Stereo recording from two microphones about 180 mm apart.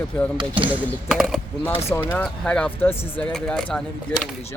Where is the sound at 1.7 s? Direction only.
15° left (ahead or behind).